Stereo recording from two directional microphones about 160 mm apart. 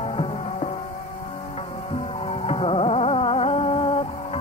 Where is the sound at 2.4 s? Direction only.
35° left (ahead or behind).